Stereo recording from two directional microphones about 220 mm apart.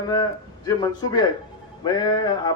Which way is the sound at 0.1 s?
15° left (ahead or behind).